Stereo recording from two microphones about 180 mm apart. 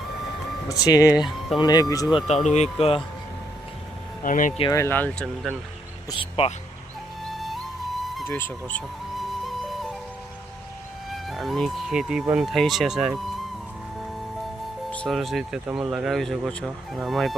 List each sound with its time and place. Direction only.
0.7 s speech: 20° left (ahead or behind)
2.1 s speech: 35° left (ahead or behind)
4.2 s speech: 45° left (ahead or behind)
4.7 s speech: 15° left (ahead or behind)
6.1 s speech: 30° left (ahead or behind)
8.0 s music: centre (ahead or behind)
8.3 s music: 10° left (ahead or behind)
11.1 s speech: centre (ahead or behind)
14.9 s speech: centre (ahead or behind)